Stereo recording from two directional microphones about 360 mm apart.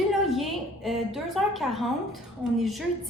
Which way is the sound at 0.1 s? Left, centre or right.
Centre.